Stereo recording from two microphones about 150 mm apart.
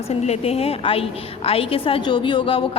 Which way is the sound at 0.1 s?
45° left (ahead or behind).